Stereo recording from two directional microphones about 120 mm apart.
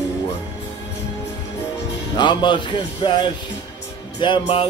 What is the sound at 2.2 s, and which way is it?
Speech, 40° left (ahead or behind).